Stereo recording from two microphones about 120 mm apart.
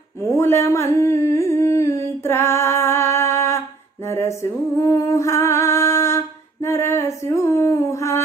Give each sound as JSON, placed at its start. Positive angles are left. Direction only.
{"t": 0.3, "sound": "humming", "side_deg": 20}